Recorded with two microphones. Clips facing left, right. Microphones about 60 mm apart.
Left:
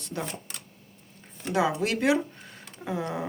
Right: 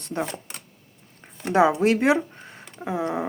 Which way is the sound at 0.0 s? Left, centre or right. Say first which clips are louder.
Right 6 dB; right.